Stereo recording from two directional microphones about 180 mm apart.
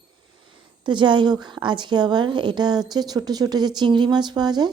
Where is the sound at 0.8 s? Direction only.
25° right (ahead or behind).